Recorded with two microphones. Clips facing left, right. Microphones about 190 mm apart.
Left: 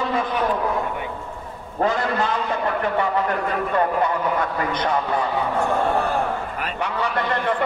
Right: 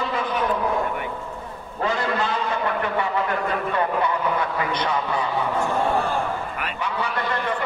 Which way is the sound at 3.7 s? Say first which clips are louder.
Left 4 dB; 45° left (ahead or behind).